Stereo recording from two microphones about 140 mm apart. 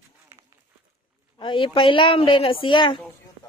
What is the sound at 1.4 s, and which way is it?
Speech, 35° left (ahead or behind).